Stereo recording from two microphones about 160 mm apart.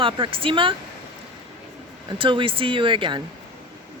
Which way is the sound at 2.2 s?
30° right (ahead or behind).